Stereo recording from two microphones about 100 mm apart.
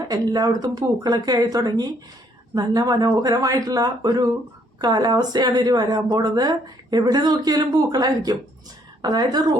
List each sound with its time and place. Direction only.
0.1 s a woman's voice: 40° right (ahead or behind)